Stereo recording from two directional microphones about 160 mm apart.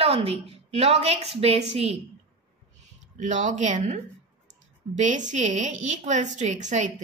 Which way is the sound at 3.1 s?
50° right (ahead or behind).